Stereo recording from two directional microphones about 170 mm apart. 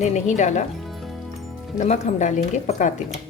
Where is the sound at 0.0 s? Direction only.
45° left (ahead or behind).